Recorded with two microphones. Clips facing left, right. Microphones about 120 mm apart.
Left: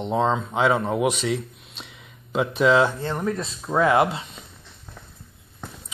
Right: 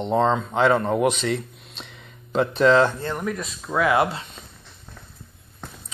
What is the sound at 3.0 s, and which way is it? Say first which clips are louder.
Speech: left 1 dB; 25° left (ahead or behind).